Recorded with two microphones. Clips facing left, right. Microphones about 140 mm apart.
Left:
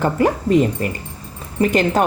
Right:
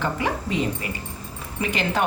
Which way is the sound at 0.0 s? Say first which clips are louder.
Left 8 dB; 45° left (ahead or behind).